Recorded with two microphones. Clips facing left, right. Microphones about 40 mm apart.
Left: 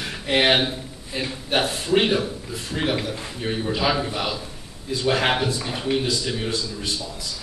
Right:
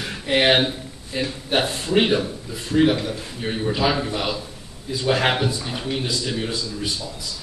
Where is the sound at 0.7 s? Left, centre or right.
Centre.